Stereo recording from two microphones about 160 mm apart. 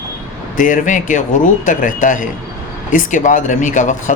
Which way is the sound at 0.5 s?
55° left (ahead or behind).